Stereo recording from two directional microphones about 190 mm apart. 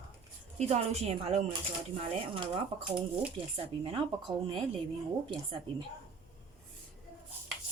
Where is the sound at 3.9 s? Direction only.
25° right (ahead or behind).